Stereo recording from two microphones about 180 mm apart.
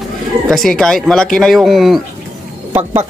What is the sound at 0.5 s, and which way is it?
Speech, centre (ahead or behind).